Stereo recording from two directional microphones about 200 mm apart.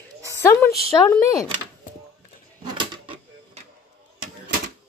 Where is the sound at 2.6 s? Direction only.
20° right (ahead or behind).